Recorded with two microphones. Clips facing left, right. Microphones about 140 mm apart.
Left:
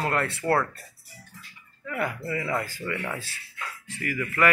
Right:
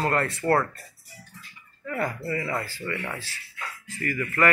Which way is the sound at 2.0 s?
30° right (ahead or behind).